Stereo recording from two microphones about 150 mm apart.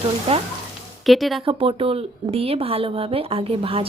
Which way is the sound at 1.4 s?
35° right (ahead or behind).